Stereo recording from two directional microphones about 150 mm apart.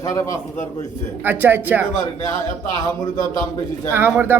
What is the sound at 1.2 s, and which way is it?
Speech, 10° right (ahead or behind).